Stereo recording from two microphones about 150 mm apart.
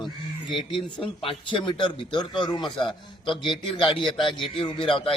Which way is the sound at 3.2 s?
35° left (ahead or behind).